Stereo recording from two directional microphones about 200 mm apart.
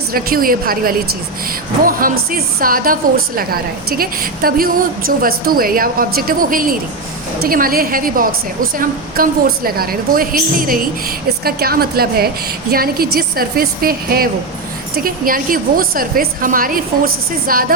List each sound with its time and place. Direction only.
0.1 s a woman's voice: 45° right (ahead or behind)